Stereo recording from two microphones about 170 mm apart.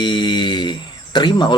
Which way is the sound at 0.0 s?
25° left (ahead or behind).